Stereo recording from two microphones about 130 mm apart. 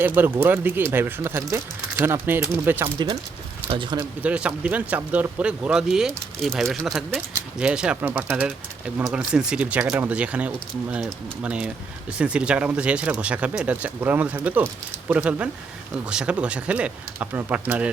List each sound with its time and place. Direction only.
0.0 s speech: 15° right (ahead or behind)
3.7 s speech: 40° right (ahead or behind)
4.2 s speech: 10° right (ahead or behind)